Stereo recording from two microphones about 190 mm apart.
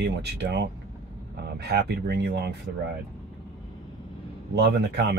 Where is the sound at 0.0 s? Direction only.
60° right (ahead or behind).